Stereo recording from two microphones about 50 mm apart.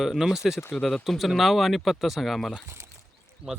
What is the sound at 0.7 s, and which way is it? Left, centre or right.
Speech, centre.